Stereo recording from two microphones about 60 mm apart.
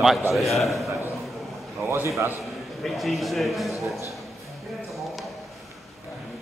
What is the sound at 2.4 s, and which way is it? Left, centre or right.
A man's voice, centre.